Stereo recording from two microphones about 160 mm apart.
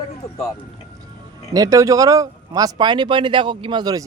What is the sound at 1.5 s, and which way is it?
Speech, 20° right (ahead or behind).